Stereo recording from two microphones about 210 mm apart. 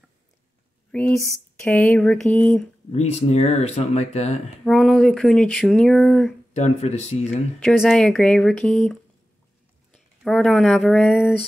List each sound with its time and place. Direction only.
0.9 s speech: 5° left (ahead or behind)
2.9 s speech: 30° left (ahead or behind)
4.6 s speech: centre (ahead or behind)
6.5 s speech: 30° left (ahead or behind)
7.6 s speech: centre (ahead or behind)
9.9 s speech: centre (ahead or behind)